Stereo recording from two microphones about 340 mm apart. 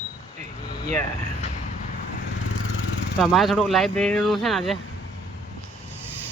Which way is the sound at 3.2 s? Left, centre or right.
Centre.